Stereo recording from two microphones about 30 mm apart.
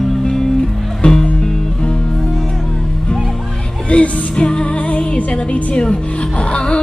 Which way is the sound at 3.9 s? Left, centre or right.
Left.